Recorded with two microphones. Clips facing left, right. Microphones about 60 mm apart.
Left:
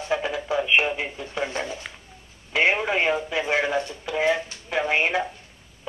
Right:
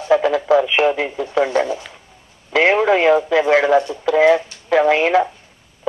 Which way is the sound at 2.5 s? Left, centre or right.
Right.